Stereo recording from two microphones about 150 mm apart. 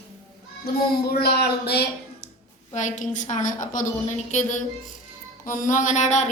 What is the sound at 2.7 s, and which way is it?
A woman's voice, 55° left (ahead or behind).